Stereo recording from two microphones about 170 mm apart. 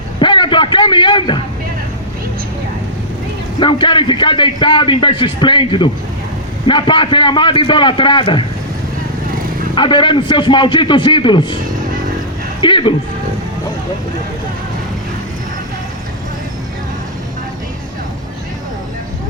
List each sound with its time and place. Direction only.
0.2 s a sound: 30° left (ahead or behind)
3.6 s a man's voice: 30° left (ahead or behind)
9.7 s a man's voice: 30° left (ahead or behind)
12.6 s a man's voice: 30° left (ahead or behind)